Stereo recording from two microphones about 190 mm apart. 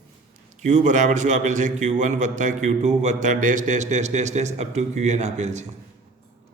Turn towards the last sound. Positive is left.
turn(degrees=-35)  # may be behind; listen again after turning